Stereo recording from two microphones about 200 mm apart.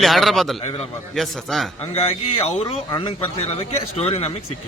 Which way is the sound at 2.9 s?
20° left (ahead or behind).